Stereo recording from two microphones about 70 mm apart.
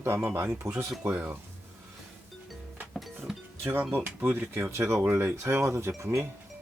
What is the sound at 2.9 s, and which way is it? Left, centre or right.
Music, centre.